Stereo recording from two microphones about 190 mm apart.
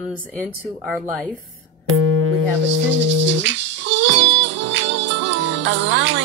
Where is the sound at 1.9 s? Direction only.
90° right.